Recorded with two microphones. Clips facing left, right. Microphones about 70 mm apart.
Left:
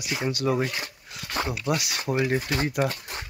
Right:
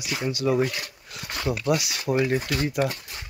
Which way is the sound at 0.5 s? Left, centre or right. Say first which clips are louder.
Right 3 dB; left.